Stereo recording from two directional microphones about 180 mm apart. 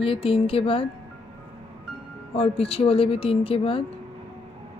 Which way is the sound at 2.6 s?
30° left (ahead or behind).